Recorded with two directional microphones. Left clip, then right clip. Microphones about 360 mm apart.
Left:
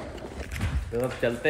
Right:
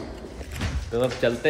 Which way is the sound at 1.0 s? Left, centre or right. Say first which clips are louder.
Right 4 dB; centre.